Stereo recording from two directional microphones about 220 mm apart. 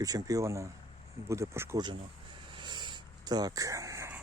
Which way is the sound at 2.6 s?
20° right (ahead or behind).